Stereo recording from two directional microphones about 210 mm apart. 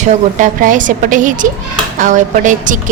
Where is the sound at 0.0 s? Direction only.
35° right (ahead or behind).